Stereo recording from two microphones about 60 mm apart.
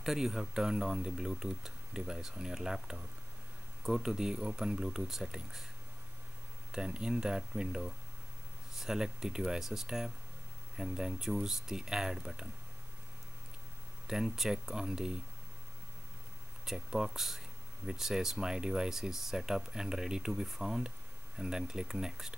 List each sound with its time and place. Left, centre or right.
0.0 s speech: centre
6.7 s speech: centre
14.0 s speech: centre
16.6 s speech: centre